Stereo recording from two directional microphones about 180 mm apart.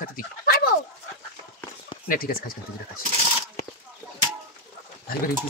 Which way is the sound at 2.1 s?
55° left (ahead or behind).